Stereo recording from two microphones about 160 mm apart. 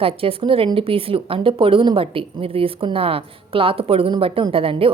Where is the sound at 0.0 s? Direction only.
35° right (ahead or behind).